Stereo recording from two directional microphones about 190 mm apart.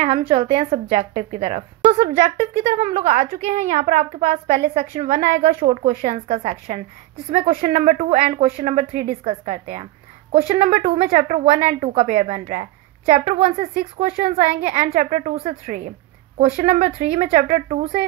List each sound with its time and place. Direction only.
0.0 s a woman's voice: 30° right (ahead or behind)